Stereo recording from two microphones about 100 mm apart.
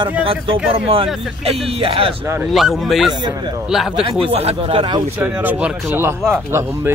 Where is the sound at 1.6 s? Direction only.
75° right (ahead or behind).